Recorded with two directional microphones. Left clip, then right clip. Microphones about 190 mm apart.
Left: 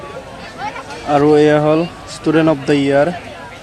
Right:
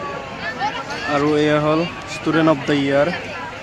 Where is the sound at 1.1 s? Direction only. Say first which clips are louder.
Left 7 dB; 20° left (ahead or behind).